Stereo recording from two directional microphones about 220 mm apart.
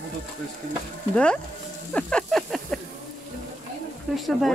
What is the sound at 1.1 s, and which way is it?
Speech, 5° left (ahead or behind).